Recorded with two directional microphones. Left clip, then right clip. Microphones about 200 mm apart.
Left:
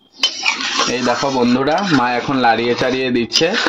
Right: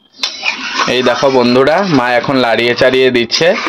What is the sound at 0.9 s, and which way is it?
Speech, 45° right (ahead or behind).